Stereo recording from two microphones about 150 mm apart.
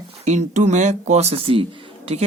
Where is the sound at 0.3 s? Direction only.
50° right (ahead or behind).